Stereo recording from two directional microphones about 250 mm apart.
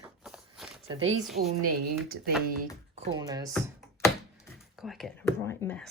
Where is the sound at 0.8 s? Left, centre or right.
Right.